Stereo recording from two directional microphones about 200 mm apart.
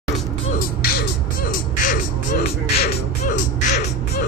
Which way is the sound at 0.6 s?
50° left (ahead or behind).